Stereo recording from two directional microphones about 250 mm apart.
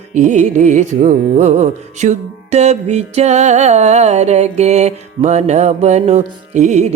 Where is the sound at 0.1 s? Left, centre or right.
Right.